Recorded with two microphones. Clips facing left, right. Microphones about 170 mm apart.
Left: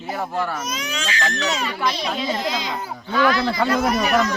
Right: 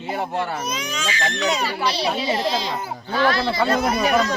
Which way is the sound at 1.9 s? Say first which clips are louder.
Right 1 dB; 35° right (ahead or behind).